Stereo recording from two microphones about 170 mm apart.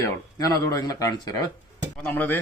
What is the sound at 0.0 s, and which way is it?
Speech, 20° left (ahead or behind).